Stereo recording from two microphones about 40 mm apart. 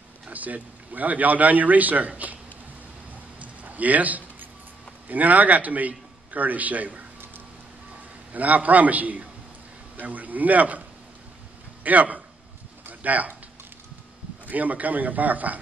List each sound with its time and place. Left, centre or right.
0.3 s a man's voice: right
3.3 s a sound: right
5.0 s a man's voice: right
8.3 s a man's voice: right
11.8 s a man's voice: right
12.8 s a sound: right
14.4 s a man's voice: right